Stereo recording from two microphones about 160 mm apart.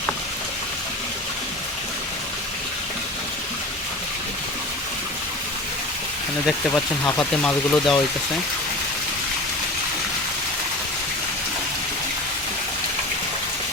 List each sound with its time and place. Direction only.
7.0 s speech: 10° left (ahead or behind)